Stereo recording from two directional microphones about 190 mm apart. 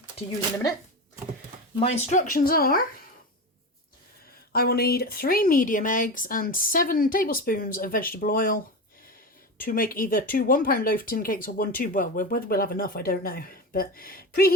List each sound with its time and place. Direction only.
1.8 s speech: 40° left (ahead or behind)
4.5 s speech: 55° left (ahead or behind)
9.6 s speech: 50° left (ahead or behind)